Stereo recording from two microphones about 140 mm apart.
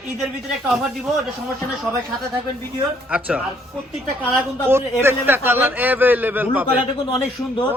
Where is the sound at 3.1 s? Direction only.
10° right (ahead or behind).